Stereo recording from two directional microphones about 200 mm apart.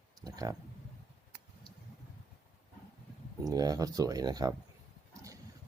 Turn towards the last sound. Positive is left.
turn(degrees=-20)  # may be behind; listen again after turning